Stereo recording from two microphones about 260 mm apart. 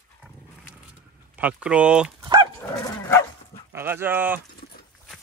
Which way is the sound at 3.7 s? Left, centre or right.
Centre.